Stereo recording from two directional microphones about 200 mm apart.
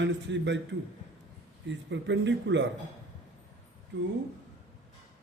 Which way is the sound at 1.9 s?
65° right (ahead or behind).